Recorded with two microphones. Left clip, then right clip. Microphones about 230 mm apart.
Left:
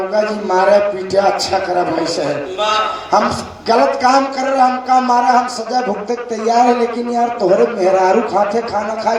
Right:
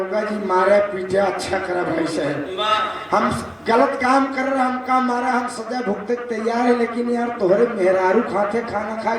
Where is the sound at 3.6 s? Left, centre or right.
Right.